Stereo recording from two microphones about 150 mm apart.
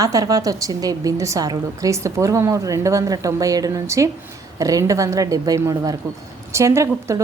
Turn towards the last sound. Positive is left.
turn(degrees=-20)  # may be behind; listen again after turning